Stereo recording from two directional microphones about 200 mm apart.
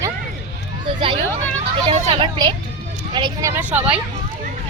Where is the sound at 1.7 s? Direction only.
25° right (ahead or behind); by 4.0 s 10° right (ahead or behind).